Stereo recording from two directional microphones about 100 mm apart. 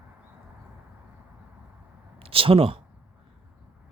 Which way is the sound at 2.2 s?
65° right (ahead or behind).